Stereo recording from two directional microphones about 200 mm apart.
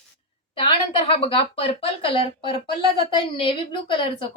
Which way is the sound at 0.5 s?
25° left (ahead or behind).